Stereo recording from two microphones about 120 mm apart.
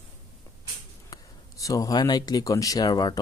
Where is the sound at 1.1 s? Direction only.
30° left (ahead or behind).